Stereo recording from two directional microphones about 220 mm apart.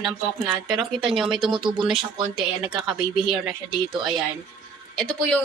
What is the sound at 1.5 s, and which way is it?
Speech, 20° right (ahead or behind).